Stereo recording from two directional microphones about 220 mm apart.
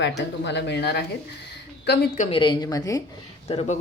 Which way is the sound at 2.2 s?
25° left (ahead or behind).